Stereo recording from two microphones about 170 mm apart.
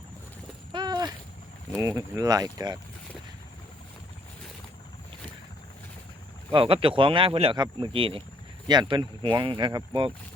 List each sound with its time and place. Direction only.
0.7 s a sound: 25° right (ahead or behind)
1.8 s speech: 20° right (ahead or behind)
6.5 s speech: 30° right (ahead or behind)